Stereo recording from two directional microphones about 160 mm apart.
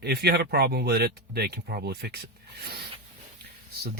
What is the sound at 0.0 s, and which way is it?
Speech, 85° right.